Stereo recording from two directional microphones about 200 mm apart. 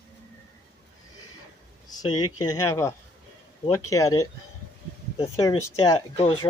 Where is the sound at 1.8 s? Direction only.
20° left (ahead or behind).